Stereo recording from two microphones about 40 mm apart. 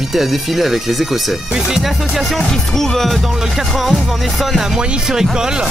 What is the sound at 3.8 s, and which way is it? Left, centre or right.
Speech, centre.